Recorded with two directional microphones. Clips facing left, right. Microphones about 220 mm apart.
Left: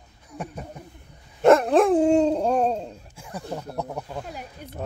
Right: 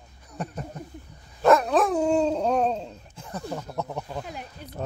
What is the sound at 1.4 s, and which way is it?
Dog, 25° left (ahead or behind).